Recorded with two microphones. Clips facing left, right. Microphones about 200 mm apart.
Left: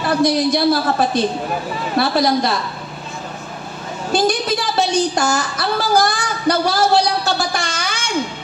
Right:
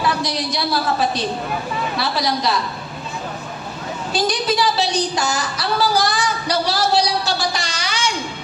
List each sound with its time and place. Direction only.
0.0 s a woman's voice: 50° left (ahead or behind)
4.1 s a woman's voice: 50° left (ahead or behind)